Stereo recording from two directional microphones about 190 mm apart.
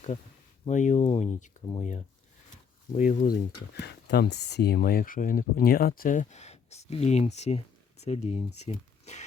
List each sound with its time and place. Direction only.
0.6 s speech: 40° left (ahead or behind)
1.6 s speech: 25° left (ahead or behind)
3.0 s speech: 45° left (ahead or behind)
3.3 s speech: 60° left (ahead or behind); by 9.2 s 35° left (ahead or behind)